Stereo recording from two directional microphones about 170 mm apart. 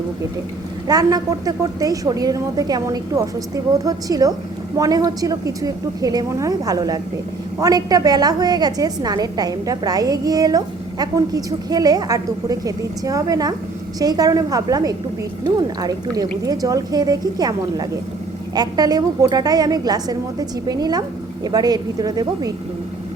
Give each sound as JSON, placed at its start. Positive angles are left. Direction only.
{"t": 0.9, "sound": "a woman's voice", "side_deg": -20}